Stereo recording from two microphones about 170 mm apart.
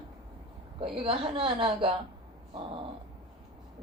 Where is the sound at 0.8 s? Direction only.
30° right (ahead or behind).